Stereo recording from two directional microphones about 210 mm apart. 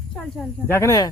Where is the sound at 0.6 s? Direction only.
15° left (ahead or behind).